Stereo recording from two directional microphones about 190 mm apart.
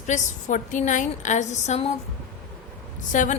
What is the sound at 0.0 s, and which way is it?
A woman's voice, 40° left (ahead or behind).